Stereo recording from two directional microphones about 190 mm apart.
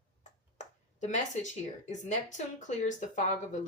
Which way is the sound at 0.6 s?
40° left (ahead or behind).